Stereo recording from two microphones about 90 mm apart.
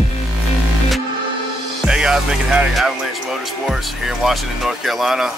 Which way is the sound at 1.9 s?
10° right (ahead or behind).